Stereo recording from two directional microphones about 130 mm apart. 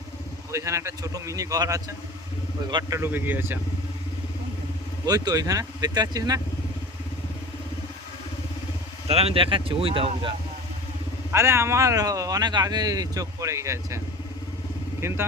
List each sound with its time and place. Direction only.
0.5 s speech: 20° right (ahead or behind)
3.0 s speech: 15° right (ahead or behind)
5.0 s speech: 30° right (ahead or behind)
9.0 s speech: 50° right (ahead or behind)
11.3 s speech: 20° right (ahead or behind)
15.0 s speech: 20° right (ahead or behind)